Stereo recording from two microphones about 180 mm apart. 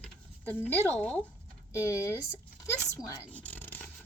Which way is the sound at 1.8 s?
15° left (ahead or behind).